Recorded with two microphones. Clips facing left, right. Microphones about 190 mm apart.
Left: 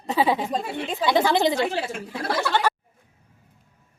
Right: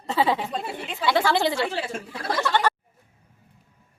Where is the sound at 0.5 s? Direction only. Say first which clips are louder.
Left 4 dB; 40° left (ahead or behind).